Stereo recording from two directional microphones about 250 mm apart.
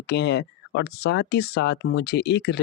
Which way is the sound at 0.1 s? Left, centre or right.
Left.